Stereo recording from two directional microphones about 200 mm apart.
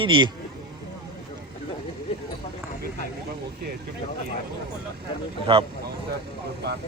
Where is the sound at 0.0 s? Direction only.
25° right (ahead or behind).